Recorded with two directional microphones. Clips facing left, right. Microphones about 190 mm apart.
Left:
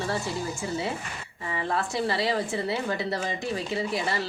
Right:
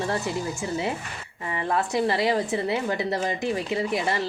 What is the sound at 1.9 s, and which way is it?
A woman's voice, 20° right (ahead or behind).